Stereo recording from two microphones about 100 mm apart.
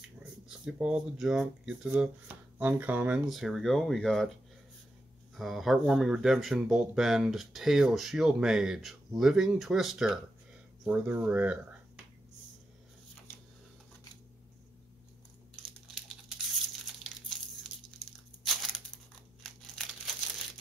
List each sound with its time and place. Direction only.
0.2 s speech: 10° right (ahead or behind)
1.9 s speech: 15° right (ahead or behind)
3.3 s speech: centre (ahead or behind)
5.3 s speech: centre (ahead or behind)
10.9 s speech: 15° right (ahead or behind)
15.9 s a sound: 5° right (ahead or behind)
18.4 s a sound: centre (ahead or behind)
19.4 s crumpling: 5° left (ahead or behind)